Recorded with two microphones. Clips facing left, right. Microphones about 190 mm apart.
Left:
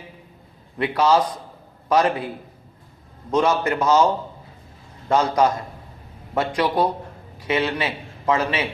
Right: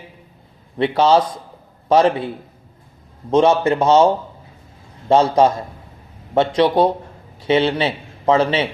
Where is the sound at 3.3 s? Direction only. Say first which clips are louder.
Right 6 dB; 25° right (ahead or behind).